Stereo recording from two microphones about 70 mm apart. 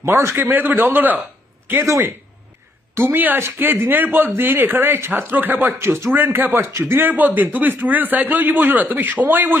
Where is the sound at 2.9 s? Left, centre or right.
Right.